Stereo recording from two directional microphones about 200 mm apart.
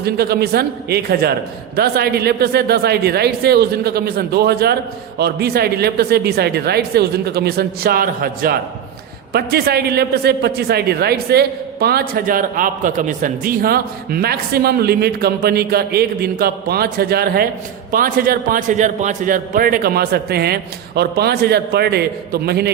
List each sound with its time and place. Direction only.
0.0 s a man's voice: 50° right (ahead or behind)